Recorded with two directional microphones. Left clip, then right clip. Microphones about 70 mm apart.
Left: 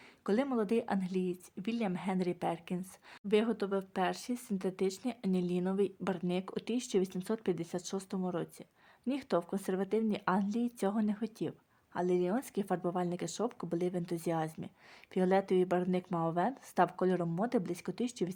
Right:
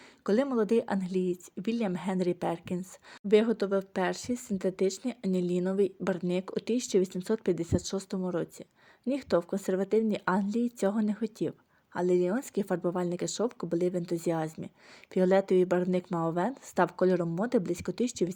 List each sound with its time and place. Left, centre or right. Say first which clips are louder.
0.5 s a woman's voice: right 5 dB; right